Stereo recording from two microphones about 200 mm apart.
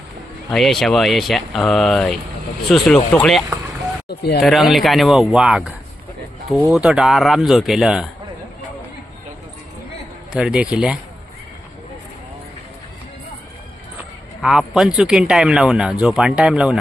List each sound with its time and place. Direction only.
0.5 s speech: centre (ahead or behind)
4.1 s speech: 55° left (ahead or behind)
4.4 s speech: centre (ahead or behind)
10.3 s speech: 5° right (ahead or behind)
14.4 s speech: centre (ahead or behind)